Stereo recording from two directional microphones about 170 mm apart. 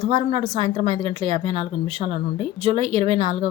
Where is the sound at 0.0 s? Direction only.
40° right (ahead or behind).